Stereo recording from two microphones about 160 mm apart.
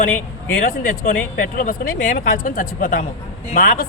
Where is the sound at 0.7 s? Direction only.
55° left (ahead or behind).